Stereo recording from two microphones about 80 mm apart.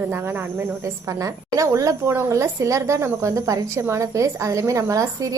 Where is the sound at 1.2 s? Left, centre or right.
Right.